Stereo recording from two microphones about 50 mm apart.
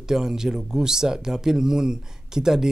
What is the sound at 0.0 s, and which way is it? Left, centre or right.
Speech, centre.